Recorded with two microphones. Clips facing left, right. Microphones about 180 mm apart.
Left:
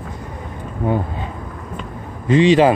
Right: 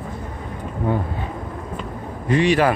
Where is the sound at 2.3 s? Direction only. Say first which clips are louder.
Left 5 dB; 20° left (ahead or behind).